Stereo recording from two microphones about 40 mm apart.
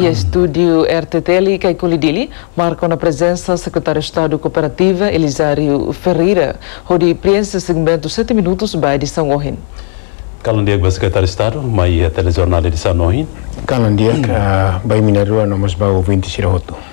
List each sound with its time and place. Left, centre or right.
0.0 s speech: right
2.7 s speech: centre